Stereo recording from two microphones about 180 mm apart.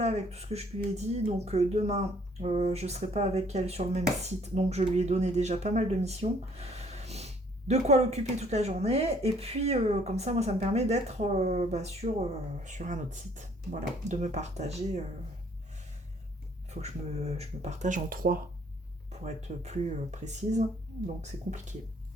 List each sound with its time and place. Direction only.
0.0 s speech: 35° right (ahead or behind)
16.8 s speech: 35° right (ahead or behind); by 18.4 s 50° right (ahead or behind)
19.2 s speech: 40° right (ahead or behind)